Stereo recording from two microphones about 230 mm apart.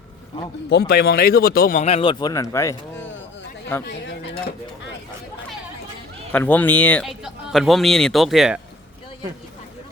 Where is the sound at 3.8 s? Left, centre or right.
Left.